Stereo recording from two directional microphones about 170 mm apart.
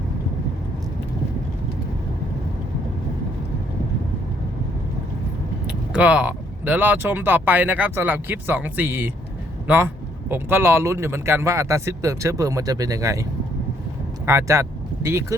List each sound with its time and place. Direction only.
5.6 s a man's voice: 5° right (ahead or behind)
14.3 s speech: 15° right (ahead or behind)